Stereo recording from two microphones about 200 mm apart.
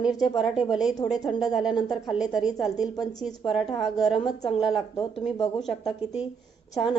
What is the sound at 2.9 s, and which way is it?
Speech, 20° left (ahead or behind).